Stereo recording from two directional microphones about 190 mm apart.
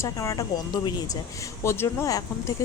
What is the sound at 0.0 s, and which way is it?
Speech, 15° left (ahead or behind).